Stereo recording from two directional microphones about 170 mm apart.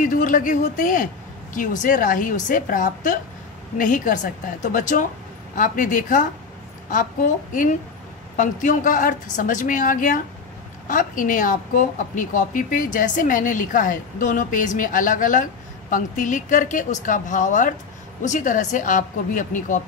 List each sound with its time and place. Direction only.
0.0 s a woman's voice: 50° left (ahead or behind)